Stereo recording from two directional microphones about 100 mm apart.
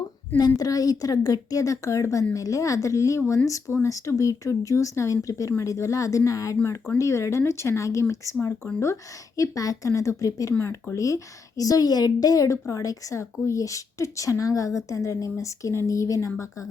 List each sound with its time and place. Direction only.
0.3 s a woman's voice: 40° left (ahead or behind)